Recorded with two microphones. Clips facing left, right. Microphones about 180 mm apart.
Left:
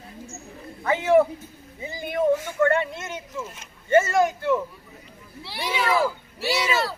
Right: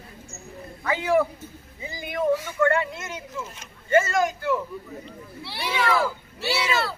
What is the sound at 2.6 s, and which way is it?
Speech, 25° left (ahead or behind).